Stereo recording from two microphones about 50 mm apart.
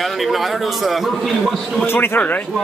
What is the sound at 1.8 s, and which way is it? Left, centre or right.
Speech, left.